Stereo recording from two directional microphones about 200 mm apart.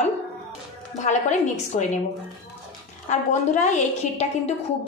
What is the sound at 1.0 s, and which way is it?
Speech, 35° left (ahead or behind).